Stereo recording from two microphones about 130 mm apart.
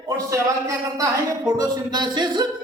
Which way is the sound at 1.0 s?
30° right (ahead or behind).